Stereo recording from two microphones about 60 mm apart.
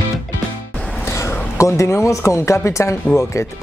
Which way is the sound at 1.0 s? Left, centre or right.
Left.